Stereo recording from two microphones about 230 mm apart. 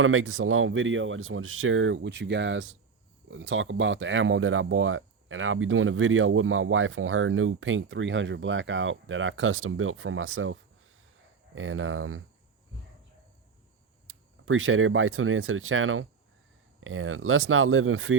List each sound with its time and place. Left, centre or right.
0.0 s speech: right
14.1 s speech: right